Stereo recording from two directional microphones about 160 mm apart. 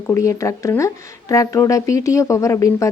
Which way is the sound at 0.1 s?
20° left (ahead or behind).